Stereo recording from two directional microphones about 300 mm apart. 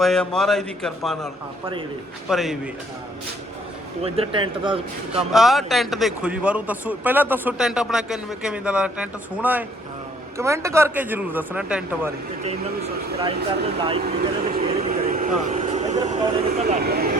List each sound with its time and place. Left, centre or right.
0.0 s a man's voice: centre
2.3 s a man's voice: centre
4.0 s a man's voice: centre
5.1 s a man's voice: centre
13.7 s speech: centre
14.0 s vehicle: right